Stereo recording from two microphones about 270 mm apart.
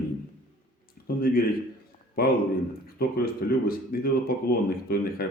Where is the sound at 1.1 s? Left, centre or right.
Left.